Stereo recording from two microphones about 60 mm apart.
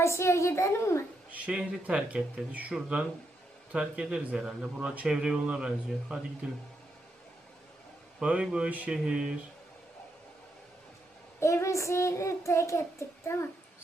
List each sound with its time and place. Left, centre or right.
0.0 s a woman's voice: left
1.3 s speech: right
8.2 s speech: centre
11.3 s child singing: left